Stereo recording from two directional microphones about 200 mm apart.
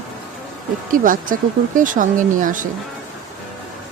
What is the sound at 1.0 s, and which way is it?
Speech, 45° right (ahead or behind).